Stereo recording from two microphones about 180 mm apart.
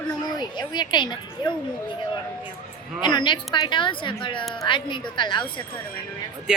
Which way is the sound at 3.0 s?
25° left (ahead or behind).